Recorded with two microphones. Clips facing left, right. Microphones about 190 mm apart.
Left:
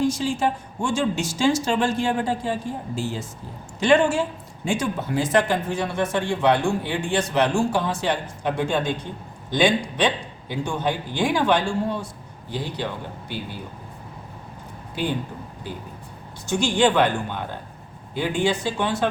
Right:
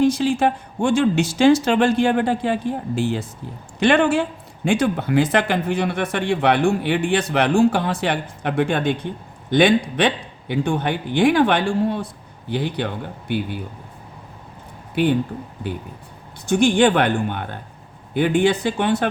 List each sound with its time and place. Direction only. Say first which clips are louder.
0.0 s speech: right 5 dB; 60° right (ahead or behind)
16.5 s speech: right 5 dB; 60° right (ahead or behind)